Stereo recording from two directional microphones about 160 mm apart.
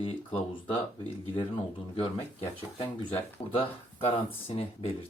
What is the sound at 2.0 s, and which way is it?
Speech, 35° left (ahead or behind).